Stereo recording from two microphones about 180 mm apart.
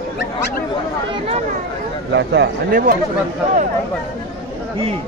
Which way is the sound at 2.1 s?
70° right (ahead or behind).